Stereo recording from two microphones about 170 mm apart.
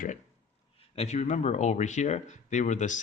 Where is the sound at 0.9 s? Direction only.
40° left (ahead or behind).